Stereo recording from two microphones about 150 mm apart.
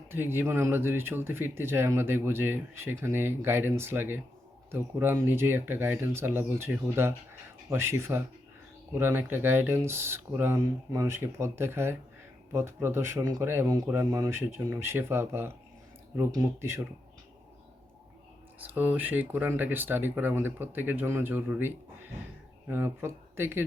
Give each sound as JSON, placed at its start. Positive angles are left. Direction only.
{"t": 0.1, "sound": "speech", "side_deg": -15}
{"t": 18.6, "sound": "speech", "side_deg": -15}